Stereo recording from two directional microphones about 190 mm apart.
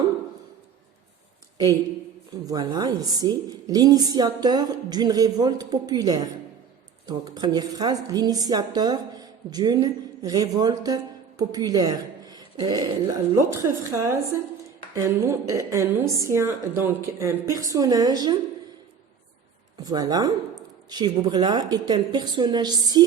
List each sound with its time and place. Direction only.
2.3 s a woman's voice: 20° right (ahead or behind)
19.8 s speech: 20° right (ahead or behind)